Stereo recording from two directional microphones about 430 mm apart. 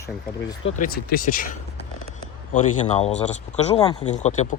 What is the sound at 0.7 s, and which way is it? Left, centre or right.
Speech, centre.